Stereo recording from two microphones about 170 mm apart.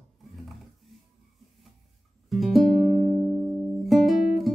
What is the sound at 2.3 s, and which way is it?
Music, centre (ahead or behind).